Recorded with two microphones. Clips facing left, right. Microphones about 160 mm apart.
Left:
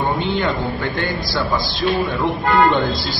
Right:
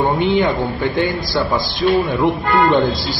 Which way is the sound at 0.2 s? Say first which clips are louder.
Right 5 dB; 15° right (ahead or behind).